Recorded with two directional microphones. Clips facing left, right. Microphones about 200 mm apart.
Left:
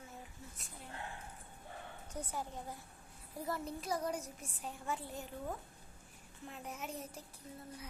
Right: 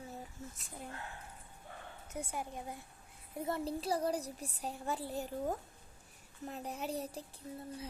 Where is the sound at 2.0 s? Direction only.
10° right (ahead or behind).